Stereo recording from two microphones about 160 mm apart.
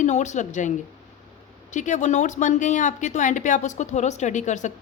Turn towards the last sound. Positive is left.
turn(degrees=50)  # may be behind; listen again after turning